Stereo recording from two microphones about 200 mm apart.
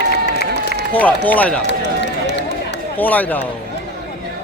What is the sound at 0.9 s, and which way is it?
Speech, 10° left (ahead or behind).